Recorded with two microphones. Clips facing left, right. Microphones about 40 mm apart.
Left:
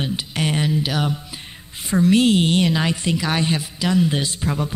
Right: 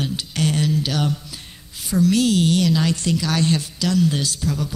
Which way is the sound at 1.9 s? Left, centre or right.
Left.